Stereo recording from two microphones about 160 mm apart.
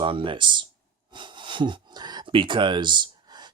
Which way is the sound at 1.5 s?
30° right (ahead or behind).